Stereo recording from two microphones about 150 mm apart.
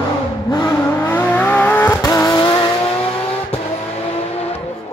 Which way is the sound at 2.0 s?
25° left (ahead or behind).